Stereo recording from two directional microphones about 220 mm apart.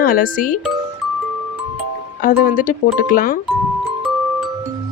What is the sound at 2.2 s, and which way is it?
Speech, 40° left (ahead or behind).